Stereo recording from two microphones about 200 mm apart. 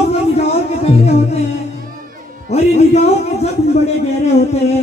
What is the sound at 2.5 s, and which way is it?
A man's voice, 30° left (ahead or behind).